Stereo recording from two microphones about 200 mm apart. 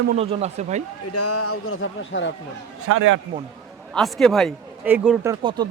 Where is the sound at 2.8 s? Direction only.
90° right.